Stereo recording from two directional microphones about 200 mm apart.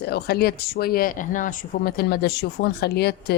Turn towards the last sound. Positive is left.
turn(degrees=55)  # may be behind; listen again after turning